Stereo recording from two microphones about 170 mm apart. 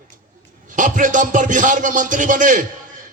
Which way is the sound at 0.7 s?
50° right (ahead or behind).